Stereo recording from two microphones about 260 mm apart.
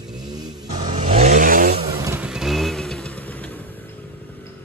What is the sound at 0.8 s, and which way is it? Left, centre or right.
Vehicle, right.